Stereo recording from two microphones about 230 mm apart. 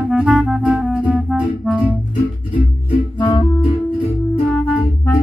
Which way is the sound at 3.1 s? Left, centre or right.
Centre.